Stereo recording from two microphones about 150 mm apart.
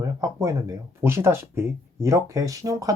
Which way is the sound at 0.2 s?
20° right (ahead or behind).